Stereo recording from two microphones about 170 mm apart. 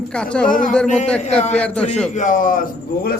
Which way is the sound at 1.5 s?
5° left (ahead or behind).